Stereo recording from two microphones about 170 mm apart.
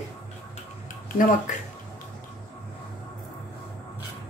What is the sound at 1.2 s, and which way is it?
Speech, 50° left (ahead or behind).